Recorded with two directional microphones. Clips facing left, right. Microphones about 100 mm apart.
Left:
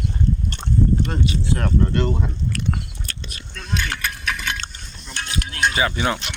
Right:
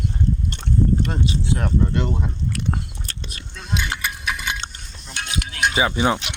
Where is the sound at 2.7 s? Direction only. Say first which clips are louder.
Even; 30° right (ahead or behind).